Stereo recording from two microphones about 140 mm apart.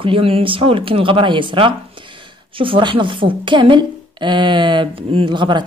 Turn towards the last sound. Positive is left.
turn(degrees=-35)  # may be behind; listen again after turning